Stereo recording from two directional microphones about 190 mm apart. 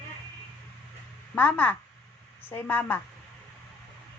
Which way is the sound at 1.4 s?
10° left (ahead or behind).